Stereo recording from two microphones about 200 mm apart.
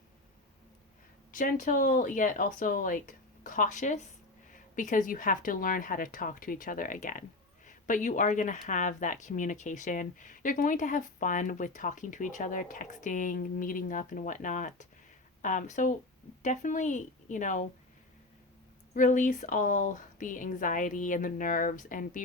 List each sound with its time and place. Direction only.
1.3 s speech: 40° left (ahead or behind)
18.9 s speech: 40° left (ahead or behind)